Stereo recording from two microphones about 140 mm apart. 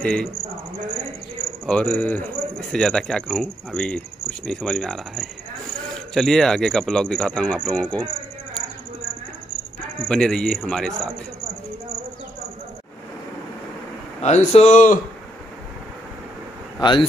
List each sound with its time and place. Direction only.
0.0 s speech: 5° left (ahead or behind)
1.7 s speech: 10° left (ahead or behind)
9.9 s speech: 5° left (ahead or behind)
14.2 s speech: 50° left (ahead or behind)